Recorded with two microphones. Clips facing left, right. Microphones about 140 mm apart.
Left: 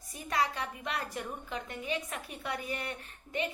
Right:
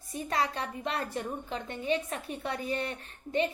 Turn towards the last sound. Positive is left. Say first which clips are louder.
# right 6 dB
turn(degrees=-30)  # may be behind; listen again after turning